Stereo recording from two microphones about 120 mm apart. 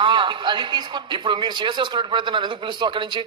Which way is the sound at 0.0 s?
45° right (ahead or behind).